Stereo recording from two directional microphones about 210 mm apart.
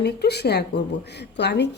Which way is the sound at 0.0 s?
50° left (ahead or behind).